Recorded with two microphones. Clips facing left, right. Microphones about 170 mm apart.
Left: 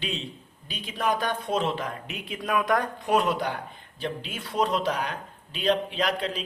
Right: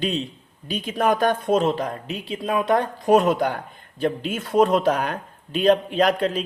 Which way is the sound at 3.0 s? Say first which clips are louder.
Right 9 dB; 45° right (ahead or behind).